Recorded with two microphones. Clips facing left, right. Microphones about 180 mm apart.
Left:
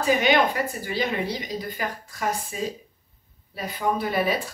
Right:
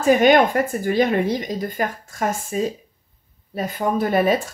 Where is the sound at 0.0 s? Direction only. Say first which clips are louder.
Right 6 dB; 50° right (ahead or behind).